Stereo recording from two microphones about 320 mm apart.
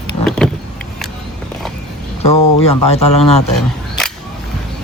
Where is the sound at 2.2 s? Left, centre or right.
Centre.